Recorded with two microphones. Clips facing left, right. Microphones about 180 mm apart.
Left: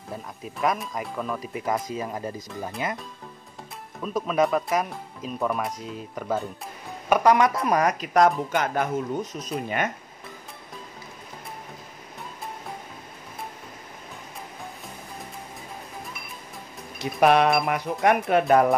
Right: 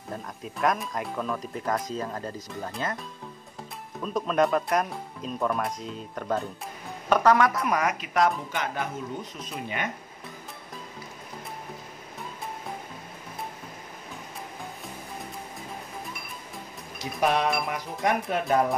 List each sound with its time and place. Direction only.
0.1 s speech: centre (ahead or behind)
4.0 s speech: 5° left (ahead or behind); by 7.6 s 20° left (ahead or behind)
7.6 s speech: 35° left (ahead or behind)
17.0 s music: 65° left (ahead or behind)
18.5 s speech: 65° left (ahead or behind)